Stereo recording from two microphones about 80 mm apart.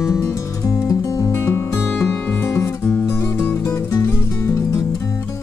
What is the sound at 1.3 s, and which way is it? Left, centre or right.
Music, left.